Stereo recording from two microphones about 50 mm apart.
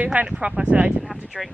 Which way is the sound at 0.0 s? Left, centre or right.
Right.